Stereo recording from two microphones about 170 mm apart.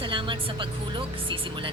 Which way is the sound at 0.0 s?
30° right (ahead or behind).